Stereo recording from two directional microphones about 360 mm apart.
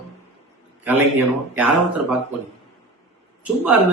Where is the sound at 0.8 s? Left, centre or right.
Centre.